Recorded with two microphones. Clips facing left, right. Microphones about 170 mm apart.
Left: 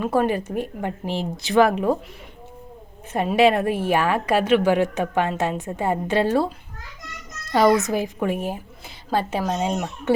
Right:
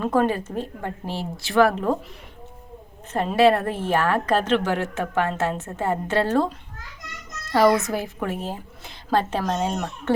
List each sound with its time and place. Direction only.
0.0 s a woman's voice: 10° left (ahead or behind)
3.1 s a woman's voice: 10° left (ahead or behind)
7.5 s a woman's voice: 20° left (ahead or behind)
9.0 s a woman's voice: 5° left (ahead or behind)